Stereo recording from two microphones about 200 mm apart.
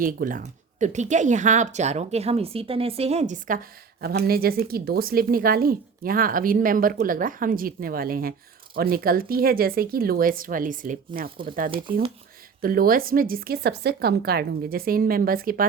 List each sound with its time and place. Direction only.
0.0 s speech: 45° right (ahead or behind)
11.7 s speech: 25° right (ahead or behind)
12.6 s speech: 45° right (ahead or behind)